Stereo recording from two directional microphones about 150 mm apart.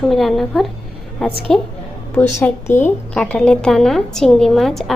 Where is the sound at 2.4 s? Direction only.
15° left (ahead or behind).